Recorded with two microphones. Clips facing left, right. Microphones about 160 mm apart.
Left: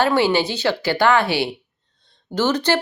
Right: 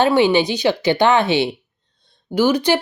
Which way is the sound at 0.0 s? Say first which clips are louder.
Right 3 dB; 15° right (ahead or behind).